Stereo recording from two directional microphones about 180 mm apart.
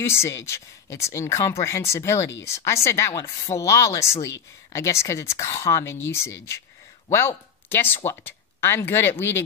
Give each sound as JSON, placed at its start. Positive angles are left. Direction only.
{"t": 0.0, "sound": "speech", "side_deg": 15}